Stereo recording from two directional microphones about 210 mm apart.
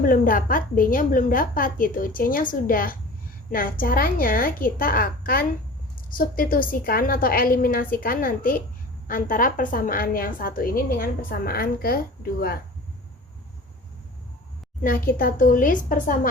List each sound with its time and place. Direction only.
0.0 s a woman's voice: 40° left (ahead or behind)
14.8 s a woman's voice: 45° left (ahead or behind)